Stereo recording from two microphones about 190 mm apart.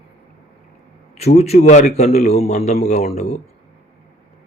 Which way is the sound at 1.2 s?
35° left (ahead or behind).